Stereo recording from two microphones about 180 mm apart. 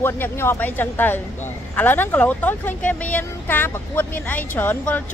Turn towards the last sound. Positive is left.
turn(degrees=10)  # may be behind; listen again after turning